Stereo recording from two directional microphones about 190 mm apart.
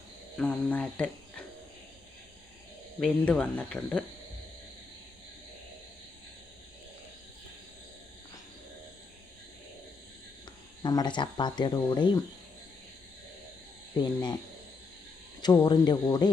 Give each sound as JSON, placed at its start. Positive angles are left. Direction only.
{"t": 0.3, "sound": "speech", "side_deg": 5}
{"t": 3.0, "sound": "speech", "side_deg": 5}
{"t": 10.8, "sound": "speech", "side_deg": 20}
{"t": 14.0, "sound": "speech", "side_deg": 20}
{"t": 15.4, "sound": "speech", "side_deg": 20}